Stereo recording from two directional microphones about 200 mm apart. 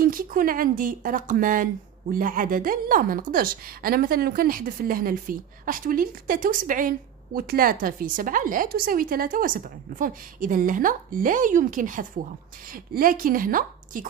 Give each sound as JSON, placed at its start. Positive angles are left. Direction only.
{"t": 0.0, "sound": "speech", "side_deg": -45}